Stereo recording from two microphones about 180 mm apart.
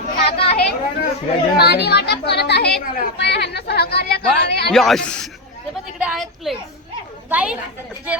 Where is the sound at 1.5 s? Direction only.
65° left (ahead or behind).